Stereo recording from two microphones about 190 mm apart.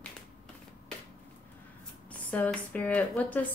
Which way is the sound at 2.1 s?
5° left (ahead or behind).